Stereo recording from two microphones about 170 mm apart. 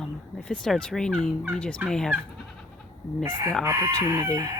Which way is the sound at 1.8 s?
5° left (ahead or behind).